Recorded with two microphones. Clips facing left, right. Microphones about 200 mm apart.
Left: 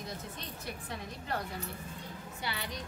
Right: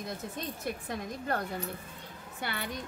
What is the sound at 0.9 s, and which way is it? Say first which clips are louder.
Speech: right 4 dB; 50° right (ahead or behind).